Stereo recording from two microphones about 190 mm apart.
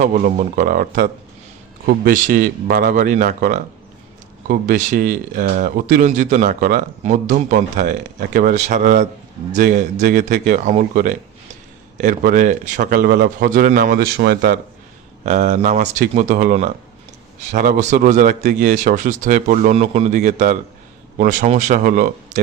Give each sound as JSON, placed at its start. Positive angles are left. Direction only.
{"t": 0.0, "sound": "speech", "side_deg": -40}
{"t": 15.2, "sound": "a man's voice", "side_deg": -40}